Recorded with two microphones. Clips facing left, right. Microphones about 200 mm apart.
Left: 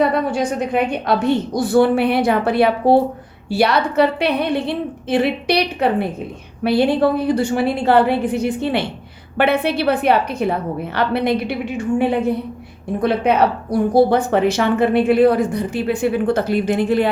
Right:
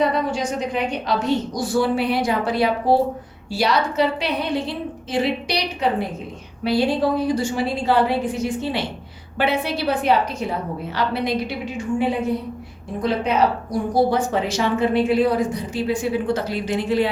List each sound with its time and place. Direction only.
0.3 s a woman's voice: 55° left (ahead or behind)